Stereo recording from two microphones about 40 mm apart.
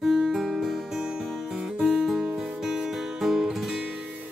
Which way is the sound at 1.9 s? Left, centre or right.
Centre.